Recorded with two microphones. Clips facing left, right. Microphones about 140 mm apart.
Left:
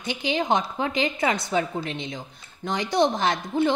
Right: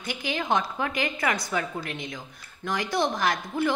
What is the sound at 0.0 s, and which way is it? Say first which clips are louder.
A woman's voice: left 5 dB; 20° left (ahead or behind).